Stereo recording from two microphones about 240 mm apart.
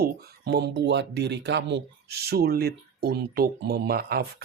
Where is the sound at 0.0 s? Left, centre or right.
Right.